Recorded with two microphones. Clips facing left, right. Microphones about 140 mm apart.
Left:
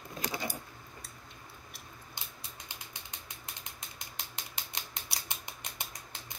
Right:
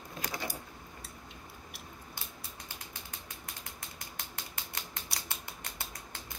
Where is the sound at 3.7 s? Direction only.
20° left (ahead or behind).